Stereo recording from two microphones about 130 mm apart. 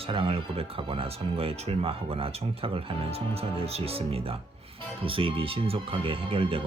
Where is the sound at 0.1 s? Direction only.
45° right (ahead or behind).